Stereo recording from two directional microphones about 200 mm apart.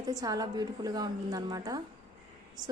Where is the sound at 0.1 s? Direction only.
20° right (ahead or behind).